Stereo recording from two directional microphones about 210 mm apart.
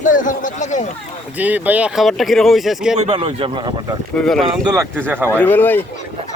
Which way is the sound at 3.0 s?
30° right (ahead or behind).